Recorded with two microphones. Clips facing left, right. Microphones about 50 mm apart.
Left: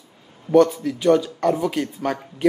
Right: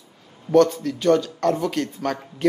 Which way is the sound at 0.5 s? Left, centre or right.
Centre.